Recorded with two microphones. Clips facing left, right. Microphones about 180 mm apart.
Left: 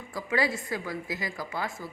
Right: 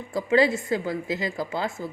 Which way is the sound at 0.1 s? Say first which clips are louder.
Right 8 dB; 25° right (ahead or behind).